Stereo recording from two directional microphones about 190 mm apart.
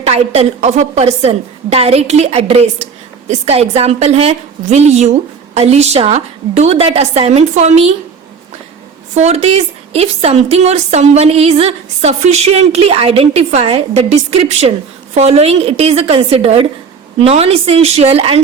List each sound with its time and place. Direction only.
0.0 s a woman's voice: 35° right (ahead or behind)
9.1 s a woman's voice: 35° right (ahead or behind)